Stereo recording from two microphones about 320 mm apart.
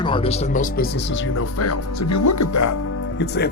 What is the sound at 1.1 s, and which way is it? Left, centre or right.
Speech, left.